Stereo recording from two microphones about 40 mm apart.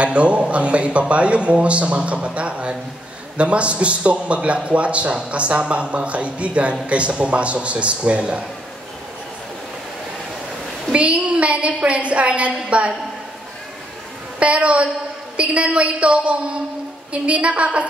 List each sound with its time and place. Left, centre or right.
0.0 s a man's voice: right
10.9 s a man's voice: right
14.4 s a man's voice: right